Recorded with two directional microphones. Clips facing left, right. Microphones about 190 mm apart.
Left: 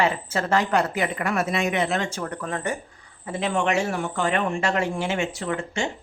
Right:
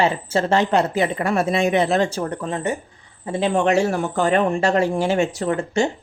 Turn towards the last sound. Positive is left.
turn(degrees=-40)  # may be behind; listen again after turning